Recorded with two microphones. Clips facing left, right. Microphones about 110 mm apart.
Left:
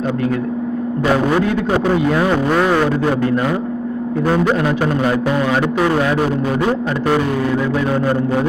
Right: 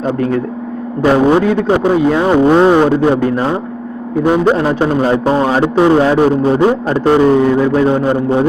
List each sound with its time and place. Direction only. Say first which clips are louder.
1.1 s a man's voice: right 6 dB; 25° right (ahead or behind)
4.5 s a man's voice: right 4 dB; 30° right (ahead or behind)